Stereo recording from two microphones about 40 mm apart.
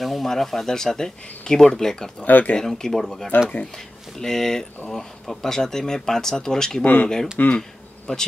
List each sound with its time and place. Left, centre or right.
0.0 s a sound: centre
0.3 s speech: centre
2.2 s speech: left
2.5 s speech: centre
6.8 s speech: left
8.1 s speech: left